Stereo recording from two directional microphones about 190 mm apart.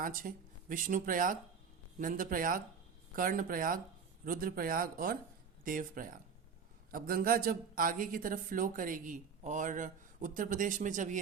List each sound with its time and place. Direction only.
0.0 s speech: 45° right (ahead or behind)